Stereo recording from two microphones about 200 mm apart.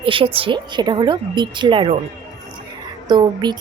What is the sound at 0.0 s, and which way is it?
Speech, 25° right (ahead or behind).